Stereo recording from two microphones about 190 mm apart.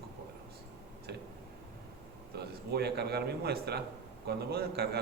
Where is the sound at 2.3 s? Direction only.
60° right (ahead or behind).